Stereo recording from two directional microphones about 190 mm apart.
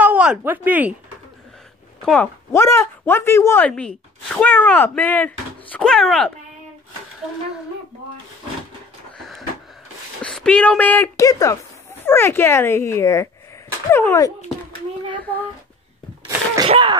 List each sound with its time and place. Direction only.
0.0 s speech: 5° right (ahead or behind)
2.0 s speech: 5° left (ahead or behind)
2.5 s speech: 15° left (ahead or behind)
10.2 s speech: 5° left (ahead or behind)
16.6 s speech: 30° right (ahead or behind)